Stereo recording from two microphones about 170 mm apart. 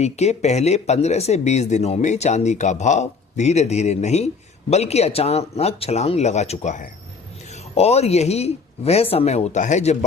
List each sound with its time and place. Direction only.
0.0 s speech: 40° left (ahead or behind)